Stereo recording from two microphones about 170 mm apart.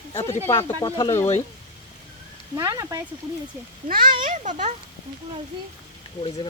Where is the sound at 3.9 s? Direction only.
55° right (ahead or behind).